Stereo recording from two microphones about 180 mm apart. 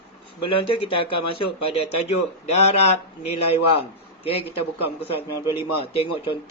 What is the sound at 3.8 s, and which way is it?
Speech, 30° left (ahead or behind).